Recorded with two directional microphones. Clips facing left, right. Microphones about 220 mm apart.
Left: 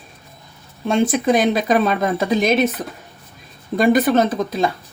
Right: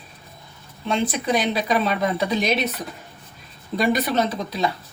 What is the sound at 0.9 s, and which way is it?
Speech, 45° left (ahead or behind).